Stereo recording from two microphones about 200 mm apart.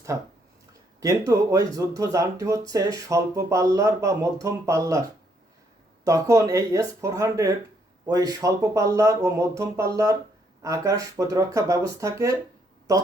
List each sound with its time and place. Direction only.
0.9 s speech: 15° right (ahead or behind)
6.1 s speech: 15° right (ahead or behind)